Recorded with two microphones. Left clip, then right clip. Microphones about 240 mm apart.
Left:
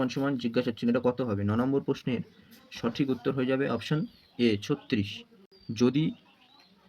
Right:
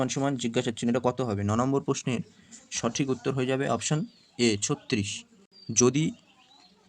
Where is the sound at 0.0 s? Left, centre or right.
Right.